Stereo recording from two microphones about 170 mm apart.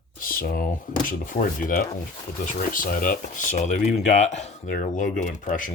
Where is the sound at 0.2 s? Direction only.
55° left (ahead or behind).